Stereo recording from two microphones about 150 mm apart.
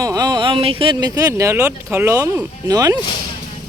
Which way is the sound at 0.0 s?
25° right (ahead or behind).